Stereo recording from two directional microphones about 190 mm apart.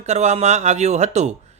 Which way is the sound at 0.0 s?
35° right (ahead or behind).